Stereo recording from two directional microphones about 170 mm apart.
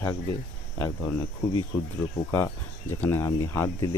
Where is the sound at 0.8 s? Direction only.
15° left (ahead or behind).